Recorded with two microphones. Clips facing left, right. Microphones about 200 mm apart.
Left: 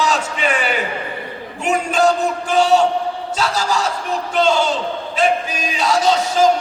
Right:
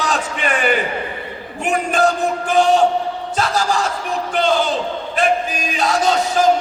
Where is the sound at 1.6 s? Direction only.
55° right (ahead or behind).